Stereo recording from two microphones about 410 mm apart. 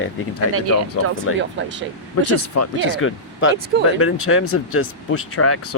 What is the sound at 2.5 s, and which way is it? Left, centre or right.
Speech, left.